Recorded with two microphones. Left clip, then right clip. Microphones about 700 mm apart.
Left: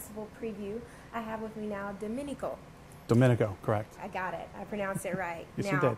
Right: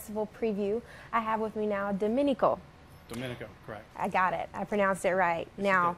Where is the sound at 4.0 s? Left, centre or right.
Right.